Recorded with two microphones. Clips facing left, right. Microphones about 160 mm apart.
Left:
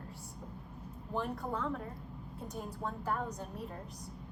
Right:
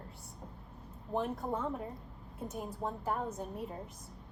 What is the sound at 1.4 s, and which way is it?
Speech, 20° right (ahead or behind).